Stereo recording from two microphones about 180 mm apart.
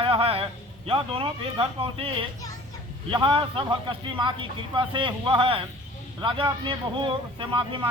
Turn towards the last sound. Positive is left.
turn(degrees=-30)  # may be behind; listen again after turning